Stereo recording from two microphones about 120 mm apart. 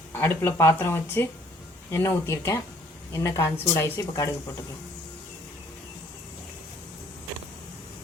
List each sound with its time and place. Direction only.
0.1 s speech: 20° left (ahead or behind)